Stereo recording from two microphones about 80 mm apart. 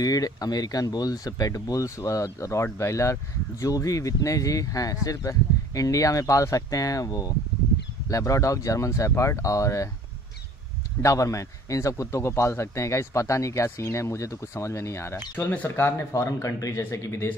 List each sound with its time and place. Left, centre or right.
0.0 s a man's voice: left
11.0 s a man's voice: left